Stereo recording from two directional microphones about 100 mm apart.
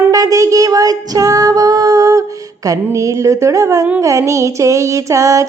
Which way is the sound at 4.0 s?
30° right (ahead or behind).